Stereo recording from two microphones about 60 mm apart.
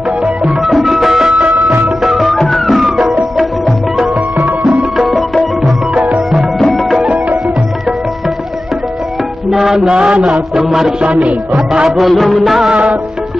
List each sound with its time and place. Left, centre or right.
0.7 s music: centre
4.4 s music: right
4.9 s music: centre
5.9 s music: right
6.6 s music: centre
9.5 s music: centre
9.8 s music: centre
10.5 s music: centre
11.0 s music: centre
12.0 s music: centre